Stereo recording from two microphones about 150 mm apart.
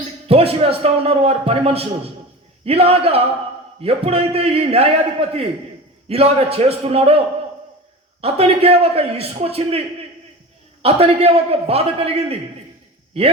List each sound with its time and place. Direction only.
0.3 s a man's voice: 40° right (ahead or behind)
8.2 s a man's voice: 40° right (ahead or behind)
10.8 s a man's voice: 40° right (ahead or behind)